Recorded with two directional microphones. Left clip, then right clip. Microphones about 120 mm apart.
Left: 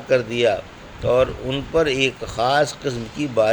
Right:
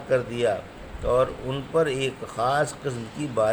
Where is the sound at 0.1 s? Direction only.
40° left (ahead or behind).